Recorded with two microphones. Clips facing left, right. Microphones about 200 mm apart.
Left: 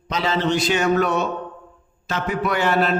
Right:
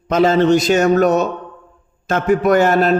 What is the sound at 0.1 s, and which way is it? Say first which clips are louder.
A man's voice: right 9 dB; 50° right (ahead or behind).